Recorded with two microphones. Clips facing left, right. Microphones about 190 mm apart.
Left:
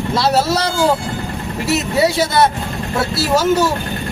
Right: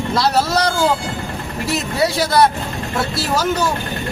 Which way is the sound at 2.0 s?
Centre (ahead or behind).